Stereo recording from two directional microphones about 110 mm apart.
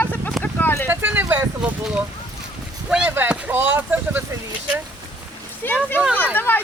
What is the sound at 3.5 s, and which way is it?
Speech, 20° right (ahead or behind).